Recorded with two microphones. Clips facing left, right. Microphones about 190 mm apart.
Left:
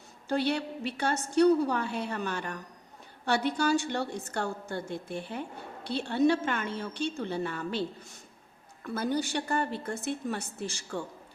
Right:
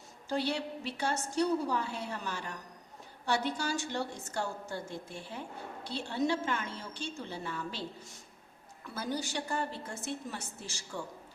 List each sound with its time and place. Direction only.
0.3 s a woman's voice: 60° left (ahead or behind)
9.0 s a woman's voice: 60° left (ahead or behind)